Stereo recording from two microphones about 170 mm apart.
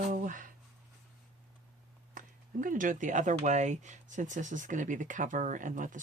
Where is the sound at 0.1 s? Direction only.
50° right (ahead or behind).